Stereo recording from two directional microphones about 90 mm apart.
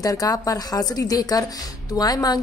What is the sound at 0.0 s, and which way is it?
A woman's voice, 45° left (ahead or behind).